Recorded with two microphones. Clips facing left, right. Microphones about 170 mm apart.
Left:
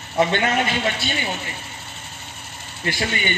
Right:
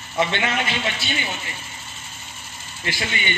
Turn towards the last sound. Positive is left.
turn(degrees=45)  # may be behind; listen again after turning